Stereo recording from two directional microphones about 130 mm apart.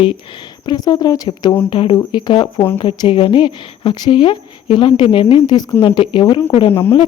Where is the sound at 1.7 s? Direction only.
40° left (ahead or behind).